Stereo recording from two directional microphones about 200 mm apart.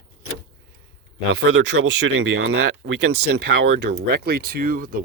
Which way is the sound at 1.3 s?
60° right (ahead or behind).